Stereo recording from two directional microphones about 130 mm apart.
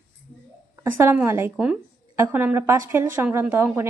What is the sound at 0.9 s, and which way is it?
A woman's voice, 15° right (ahead or behind).